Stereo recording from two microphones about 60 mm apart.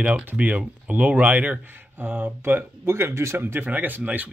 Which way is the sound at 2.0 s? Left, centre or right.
Right.